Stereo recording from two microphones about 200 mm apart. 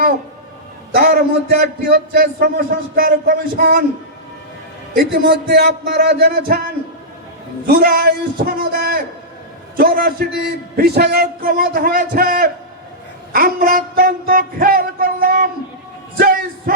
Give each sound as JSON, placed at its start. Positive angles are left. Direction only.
{"t": 0.9, "sound": "a man's voice", "side_deg": -50}
{"t": 5.3, "sound": "a man's voice", "side_deg": -50}
{"t": 7.7, "sound": "a man's voice", "side_deg": -50}
{"t": 16.1, "sound": "music", "side_deg": -45}